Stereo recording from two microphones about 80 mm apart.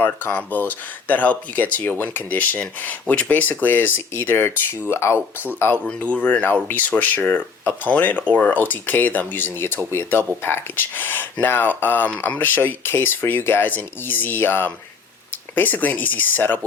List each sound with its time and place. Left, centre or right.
0.3 s speech: left
5.1 s speech: right
5.5 s speech: left
5.8 s speech: centre